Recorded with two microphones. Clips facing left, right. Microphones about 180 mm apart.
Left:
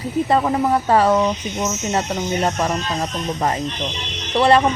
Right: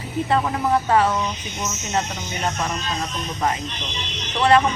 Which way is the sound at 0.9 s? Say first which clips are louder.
Left 5 dB; 40° left (ahead or behind).